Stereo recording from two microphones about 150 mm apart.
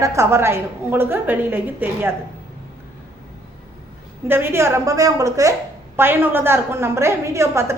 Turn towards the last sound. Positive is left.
turn(degrees=-20)  # may be behind; listen again after turning